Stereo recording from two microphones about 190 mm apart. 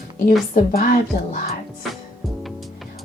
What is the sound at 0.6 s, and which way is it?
Speech, 45° left (ahead or behind).